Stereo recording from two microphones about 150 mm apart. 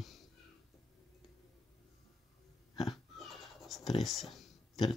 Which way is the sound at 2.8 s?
Centre (ahead or behind).